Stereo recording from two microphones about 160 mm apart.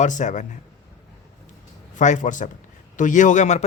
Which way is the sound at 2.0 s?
50° left (ahead or behind).